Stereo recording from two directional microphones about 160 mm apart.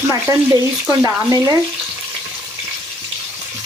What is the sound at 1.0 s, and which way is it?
Speech, 20° right (ahead or behind).